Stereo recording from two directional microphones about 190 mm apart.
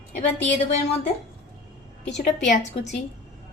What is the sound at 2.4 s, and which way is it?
Speech, 40° left (ahead or behind).